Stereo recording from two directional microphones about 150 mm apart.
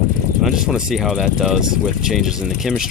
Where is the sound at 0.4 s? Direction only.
Centre (ahead or behind).